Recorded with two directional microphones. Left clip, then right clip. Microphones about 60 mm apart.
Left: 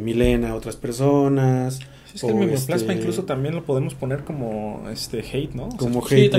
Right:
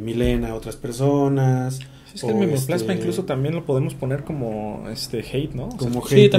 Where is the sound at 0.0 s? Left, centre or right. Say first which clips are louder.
Left 3 dB; left.